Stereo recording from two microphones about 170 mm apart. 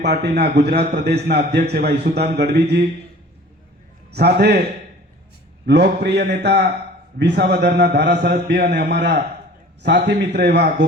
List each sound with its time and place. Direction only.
0.0 s a man's voice: 75° right (ahead or behind)
4.1 s a man's voice: 75° right (ahead or behind)
5.6 s a man's voice: 75° right (ahead or behind)
7.2 s a man's voice: 85° right